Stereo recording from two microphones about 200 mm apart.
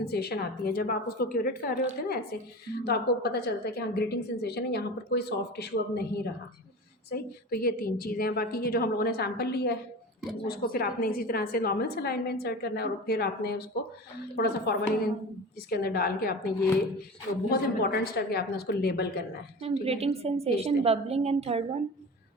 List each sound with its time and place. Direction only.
0.0 s a woman's voice: 50° left (ahead or behind)
7.1 s a woman's voice: 50° left (ahead or behind)
17.5 s a woman's voice: 50° left (ahead or behind)
19.6 s a woman's voice: 30° right (ahead or behind)